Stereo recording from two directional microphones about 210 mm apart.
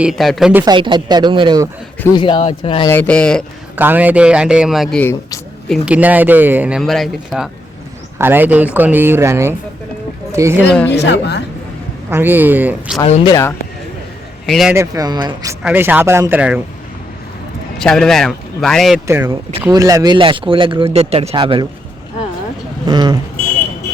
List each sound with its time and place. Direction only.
0.0 s speech: centre (ahead or behind)
0.6 s speech: 20° right (ahead or behind)
2.1 s speech: 25° left (ahead or behind)
2.9 s speech: 5° left (ahead or behind)
3.8 s speech: 10° right (ahead or behind)
10.8 s a woman's voice: 55° left (ahead or behind)
12.1 s speech: 10° right (ahead or behind)
13.2 s speech: 15° left (ahead or behind)
14.4 s speech: centre (ahead or behind)
14.8 s speech: 15° right (ahead or behind)
17.7 s speech: 5° left (ahead or behind)
19.0 s speech: 10° right (ahead or behind)
22.9 s speech: 20° right (ahead or behind)